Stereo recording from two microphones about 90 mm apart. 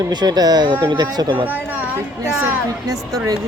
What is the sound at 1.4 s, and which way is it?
Speech, 20° right (ahead or behind).